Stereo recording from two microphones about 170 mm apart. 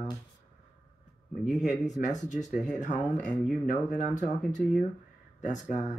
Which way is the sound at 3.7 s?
45° left (ahead or behind).